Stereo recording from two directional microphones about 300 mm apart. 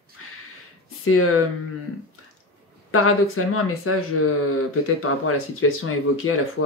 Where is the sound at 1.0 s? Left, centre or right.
Left.